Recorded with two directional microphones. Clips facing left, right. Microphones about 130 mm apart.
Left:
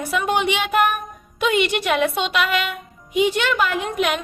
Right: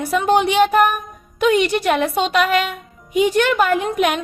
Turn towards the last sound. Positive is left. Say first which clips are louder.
# right 4 dB
turn(degrees=-45)  # may be behind; listen again after turning